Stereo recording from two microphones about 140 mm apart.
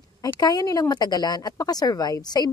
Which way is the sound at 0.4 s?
25° left (ahead or behind).